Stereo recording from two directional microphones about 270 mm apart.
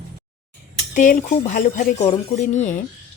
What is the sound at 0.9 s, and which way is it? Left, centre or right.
A woman's voice, left.